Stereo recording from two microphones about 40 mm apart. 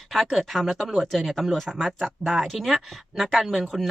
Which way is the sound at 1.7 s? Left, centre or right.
Centre.